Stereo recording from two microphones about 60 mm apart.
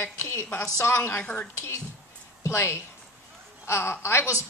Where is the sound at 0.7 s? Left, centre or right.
Left.